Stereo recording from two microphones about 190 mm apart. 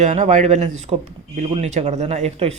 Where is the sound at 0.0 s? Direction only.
40° right (ahead or behind).